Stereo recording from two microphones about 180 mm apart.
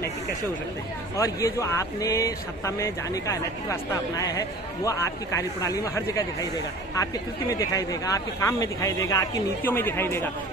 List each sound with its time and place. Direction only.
1.1 s speech: 15° left (ahead or behind)